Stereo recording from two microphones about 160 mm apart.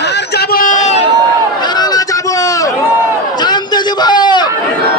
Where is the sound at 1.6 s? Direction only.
25° left (ahead or behind).